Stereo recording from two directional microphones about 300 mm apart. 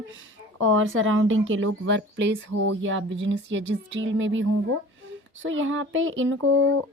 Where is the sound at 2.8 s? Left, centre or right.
Right.